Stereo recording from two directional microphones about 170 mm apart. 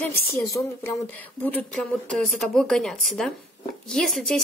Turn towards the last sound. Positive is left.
turn(degrees=0)  # may be behind; listen again after turning